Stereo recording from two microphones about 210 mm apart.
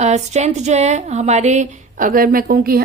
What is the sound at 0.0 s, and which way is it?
Speech, 35° right (ahead or behind).